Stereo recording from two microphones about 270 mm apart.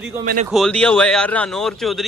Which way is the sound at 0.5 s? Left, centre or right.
Centre.